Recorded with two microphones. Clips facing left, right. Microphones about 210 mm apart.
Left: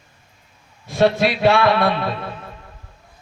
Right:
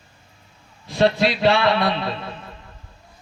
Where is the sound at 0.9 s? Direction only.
50° left (ahead or behind).